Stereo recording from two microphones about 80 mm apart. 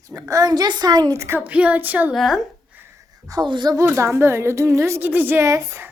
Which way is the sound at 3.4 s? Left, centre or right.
Right.